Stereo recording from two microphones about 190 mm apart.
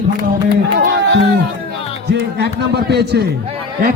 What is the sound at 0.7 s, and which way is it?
Music, 50° right (ahead or behind).